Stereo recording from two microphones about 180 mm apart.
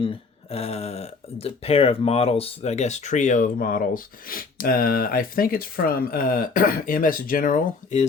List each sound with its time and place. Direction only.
0.5 s speech: 35° left (ahead or behind)